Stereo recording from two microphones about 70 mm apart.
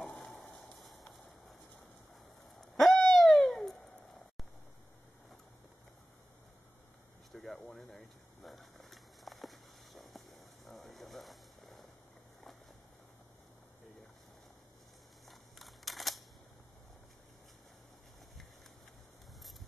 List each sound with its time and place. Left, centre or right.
0.1 s frying: centre
0.7 s a sound: centre
2.6 s owl: centre
3.1 s cat: centre
7.5 s a sound: centre
15.2 s camera: centre